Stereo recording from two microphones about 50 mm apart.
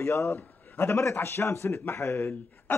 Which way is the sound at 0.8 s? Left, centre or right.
Left.